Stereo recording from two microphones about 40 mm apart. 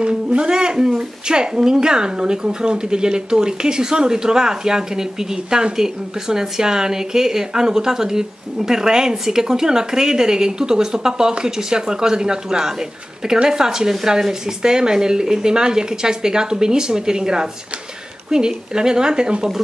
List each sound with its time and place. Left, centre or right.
0.0 s speech: right